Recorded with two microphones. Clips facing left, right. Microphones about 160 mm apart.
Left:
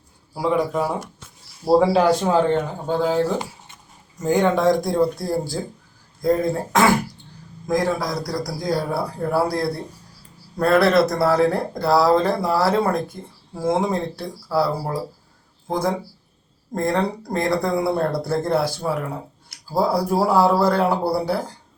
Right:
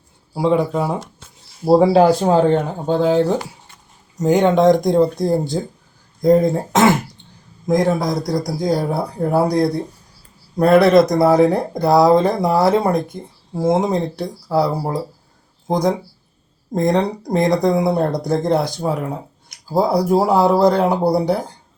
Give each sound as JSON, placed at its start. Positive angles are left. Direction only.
{"t": 0.3, "sound": "speech", "side_deg": -25}
{"t": 1.9, "sound": "speech", "side_deg": -35}
{"t": 2.8, "sound": "speech", "side_deg": -20}